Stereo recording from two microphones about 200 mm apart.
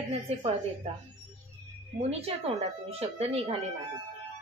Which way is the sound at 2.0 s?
30° right (ahead or behind).